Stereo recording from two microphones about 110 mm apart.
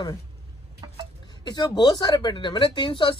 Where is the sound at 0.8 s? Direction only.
40° right (ahead or behind).